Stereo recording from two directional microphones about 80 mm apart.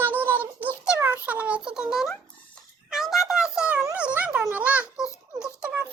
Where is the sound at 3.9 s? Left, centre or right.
Centre.